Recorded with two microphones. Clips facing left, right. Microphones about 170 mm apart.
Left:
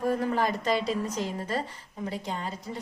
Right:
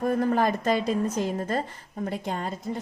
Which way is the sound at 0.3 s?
50° right (ahead or behind).